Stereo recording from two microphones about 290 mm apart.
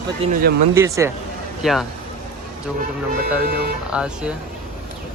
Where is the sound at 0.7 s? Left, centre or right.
Centre.